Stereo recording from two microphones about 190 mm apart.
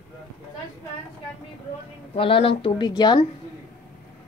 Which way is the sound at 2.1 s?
30° left (ahead or behind).